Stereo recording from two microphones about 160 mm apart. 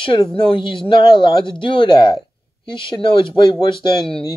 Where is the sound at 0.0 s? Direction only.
30° left (ahead or behind).